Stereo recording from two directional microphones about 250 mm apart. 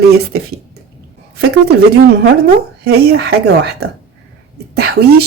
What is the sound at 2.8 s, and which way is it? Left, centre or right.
Speech, right.